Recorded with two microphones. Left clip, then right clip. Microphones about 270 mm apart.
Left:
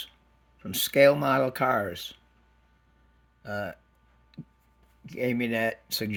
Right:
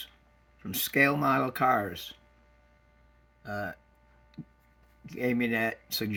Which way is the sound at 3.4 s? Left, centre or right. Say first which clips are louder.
Left 2 dB; left.